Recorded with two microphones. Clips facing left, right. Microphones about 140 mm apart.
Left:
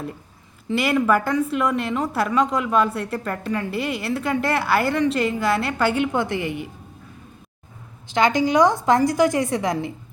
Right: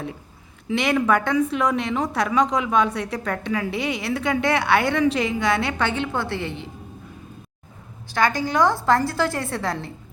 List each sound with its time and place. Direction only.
0.7 s a woman's voice: centre (ahead or behind)
8.0 s a woman's voice: 20° left (ahead or behind)